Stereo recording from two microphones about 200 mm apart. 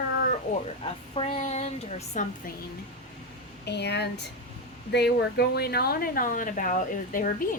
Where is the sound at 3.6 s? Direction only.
55° left (ahead or behind).